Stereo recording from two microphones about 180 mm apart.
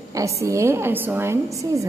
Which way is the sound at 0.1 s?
15° right (ahead or behind).